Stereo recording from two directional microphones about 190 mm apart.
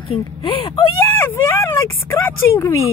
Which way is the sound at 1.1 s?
10° left (ahead or behind).